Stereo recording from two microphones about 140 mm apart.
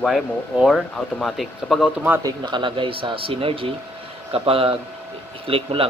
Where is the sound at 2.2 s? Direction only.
35° right (ahead or behind).